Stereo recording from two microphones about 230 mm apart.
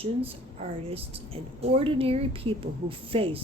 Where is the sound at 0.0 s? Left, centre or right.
Right.